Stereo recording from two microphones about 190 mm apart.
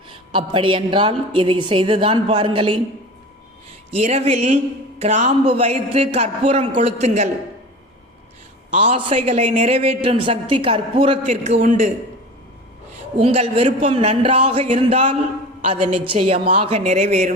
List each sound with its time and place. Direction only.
0.1 s a woman's voice: 25° right (ahead or behind)
3.9 s speech: 35° right (ahead or behind)
8.7 s a woman's voice: 30° right (ahead or behind)
11.3 s speech: 40° right (ahead or behind)
13.1 s speech: 35° right (ahead or behind)